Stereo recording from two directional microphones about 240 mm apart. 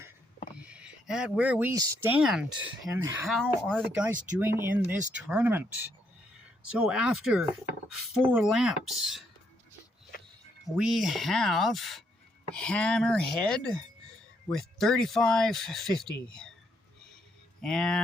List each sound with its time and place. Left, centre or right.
0.5 s speech: centre
3.2 s speech: centre
6.7 s speech: centre
10.8 s speech: centre
17.6 s speech: centre